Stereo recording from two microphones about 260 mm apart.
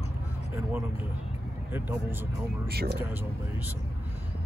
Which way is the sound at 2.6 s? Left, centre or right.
Right.